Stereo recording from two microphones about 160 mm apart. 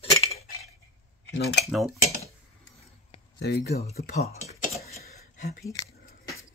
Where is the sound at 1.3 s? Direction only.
90° left.